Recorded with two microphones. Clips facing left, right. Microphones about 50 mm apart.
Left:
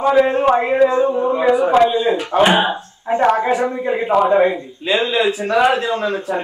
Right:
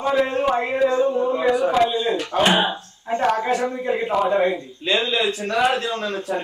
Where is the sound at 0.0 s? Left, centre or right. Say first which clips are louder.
Left 6 dB; centre.